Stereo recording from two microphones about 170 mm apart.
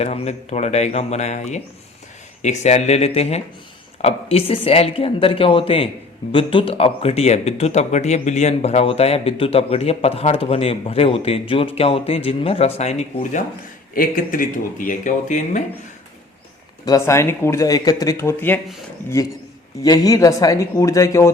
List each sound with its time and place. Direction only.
0.0 s speech: 40° left (ahead or behind)
13.9 s speech: 55° left (ahead or behind)
16.8 s speech: 20° left (ahead or behind)
19.8 s speech: 20° left (ahead or behind)